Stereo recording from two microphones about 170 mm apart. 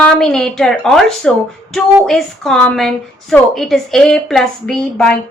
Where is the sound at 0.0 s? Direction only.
5° left (ahead or behind).